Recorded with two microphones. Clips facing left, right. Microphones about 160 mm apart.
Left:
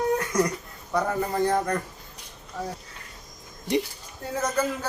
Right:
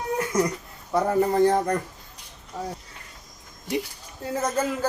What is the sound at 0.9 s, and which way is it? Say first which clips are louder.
Speech: right 5 dB; 30° right (ahead or behind).